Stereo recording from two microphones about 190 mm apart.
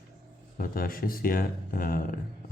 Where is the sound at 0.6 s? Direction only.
50° left (ahead or behind).